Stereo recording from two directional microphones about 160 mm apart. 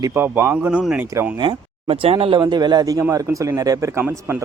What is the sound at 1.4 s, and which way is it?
Speech, 30° right (ahead or behind).